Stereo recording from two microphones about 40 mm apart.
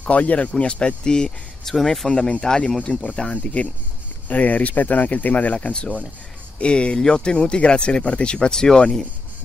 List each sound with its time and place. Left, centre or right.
0.0 s speech: left; by 1.3 s centre
1.7 s speech: centre
2.0 s speech: centre
4.3 s speech: left
5.6 s speech: left